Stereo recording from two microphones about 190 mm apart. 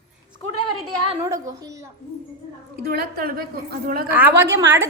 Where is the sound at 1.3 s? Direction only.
15° right (ahead or behind).